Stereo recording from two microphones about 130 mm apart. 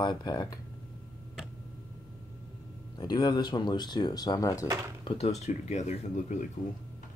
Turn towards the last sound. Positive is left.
turn(degrees=65)  # may be behind; listen again after turning